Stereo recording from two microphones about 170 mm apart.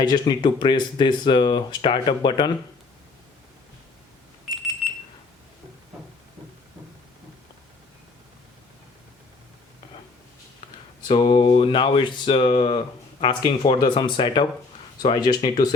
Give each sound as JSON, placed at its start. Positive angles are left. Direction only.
{"t": 0.0, "sound": "speech", "side_deg": 25}
{"t": 11.1, "sound": "speech", "side_deg": 30}